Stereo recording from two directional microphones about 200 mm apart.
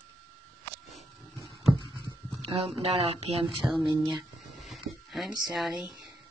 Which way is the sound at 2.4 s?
30° right (ahead or behind).